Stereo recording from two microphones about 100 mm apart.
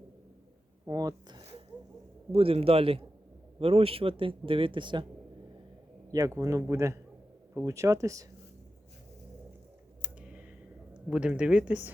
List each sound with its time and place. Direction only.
0.9 s speech: 40° right (ahead or behind)
2.3 s a man's voice: 70° right (ahead or behind); by 5.0 s 50° right (ahead or behind)
6.1 s a man's voice: 35° right (ahead or behind)
10.0 s a sound: 10° right (ahead or behind)
10.9 s speech: 10° right (ahead or behind)